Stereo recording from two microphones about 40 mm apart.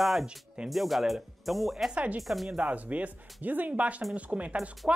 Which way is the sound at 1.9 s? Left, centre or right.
Right.